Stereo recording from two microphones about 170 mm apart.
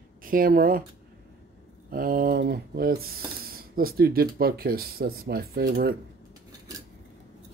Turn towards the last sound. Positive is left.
turn(degrees=-65)  # may be behind; listen again after turning